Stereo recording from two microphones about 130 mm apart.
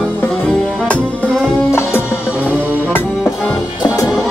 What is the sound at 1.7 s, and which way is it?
Music, 20° left (ahead or behind).